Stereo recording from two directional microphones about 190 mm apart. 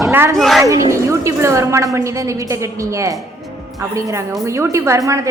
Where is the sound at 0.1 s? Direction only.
10° right (ahead or behind).